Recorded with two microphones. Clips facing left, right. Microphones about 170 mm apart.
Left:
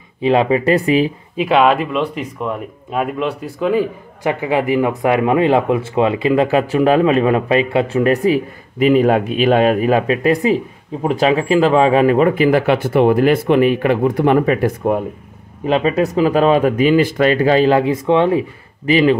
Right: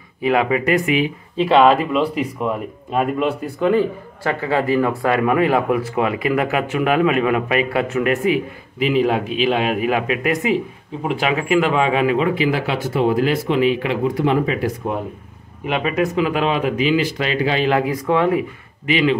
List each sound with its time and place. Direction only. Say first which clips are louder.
0.2 s speech: left 4 dB; 25° left (ahead or behind)
1.3 s speech: right 1 dB; 10° left (ahead or behind)
4.2 s speech: left 3 dB; 15° left (ahead or behind); by 15.0 s 55° left (ahead or behind)
15.6 s speech: left 4 dB; 35° left (ahead or behind)
18.9 s speech: left 5 dB; 40° left (ahead or behind)